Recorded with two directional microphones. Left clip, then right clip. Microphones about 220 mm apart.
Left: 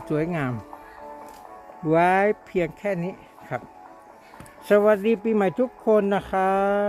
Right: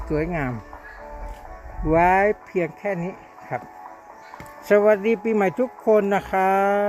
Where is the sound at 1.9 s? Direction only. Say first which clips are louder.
Right 2 dB; 10° left (ahead or behind).